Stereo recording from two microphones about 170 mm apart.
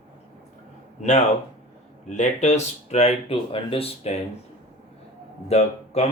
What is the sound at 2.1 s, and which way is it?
Speech, 40° left (ahead or behind).